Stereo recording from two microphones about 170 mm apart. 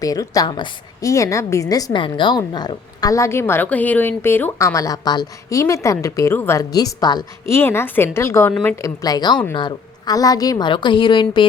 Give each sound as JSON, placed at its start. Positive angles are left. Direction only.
{"t": 0.0, "sound": "a woman's voice", "side_deg": 20}